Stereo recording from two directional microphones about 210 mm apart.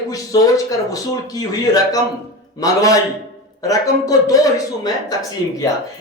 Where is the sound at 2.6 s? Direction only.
15° left (ahead or behind).